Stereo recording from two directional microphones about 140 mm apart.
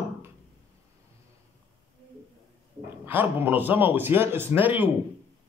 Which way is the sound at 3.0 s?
15° right (ahead or behind).